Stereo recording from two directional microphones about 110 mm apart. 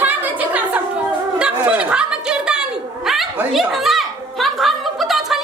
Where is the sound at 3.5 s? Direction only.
Centre (ahead or behind).